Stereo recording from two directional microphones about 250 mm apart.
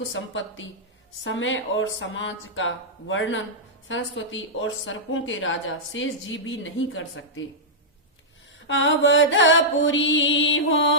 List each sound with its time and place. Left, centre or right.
0.1 s speech: left
8.6 s speech: left